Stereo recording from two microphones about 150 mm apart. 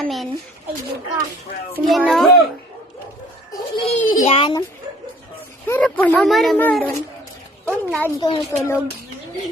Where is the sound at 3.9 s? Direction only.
50° left (ahead or behind).